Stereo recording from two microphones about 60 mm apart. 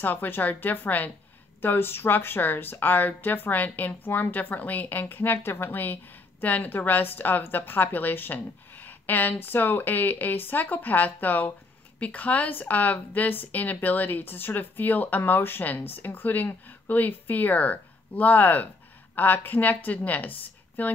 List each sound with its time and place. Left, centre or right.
0.0 s a woman's voice: left